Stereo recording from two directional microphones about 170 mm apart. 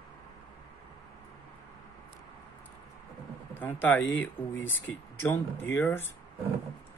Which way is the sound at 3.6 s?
10° left (ahead or behind).